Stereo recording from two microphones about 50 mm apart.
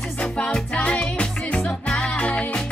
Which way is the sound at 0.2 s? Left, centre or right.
Left.